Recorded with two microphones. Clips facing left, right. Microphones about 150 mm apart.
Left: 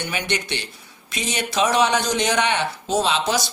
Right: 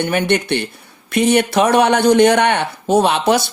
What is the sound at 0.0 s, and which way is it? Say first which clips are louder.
Speech: right 10 dB; 55° right (ahead or behind).